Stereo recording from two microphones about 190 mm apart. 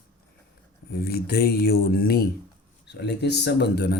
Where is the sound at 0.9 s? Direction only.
55° left (ahead or behind).